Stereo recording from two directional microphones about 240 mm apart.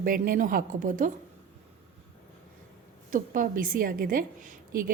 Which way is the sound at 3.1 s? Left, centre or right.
Right.